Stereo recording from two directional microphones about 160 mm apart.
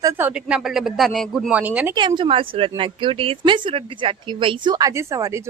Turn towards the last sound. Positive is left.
turn(degrees=-20)  # may be behind; listen again after turning